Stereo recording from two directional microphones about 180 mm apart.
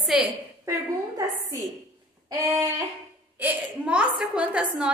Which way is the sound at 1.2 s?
20° right (ahead or behind).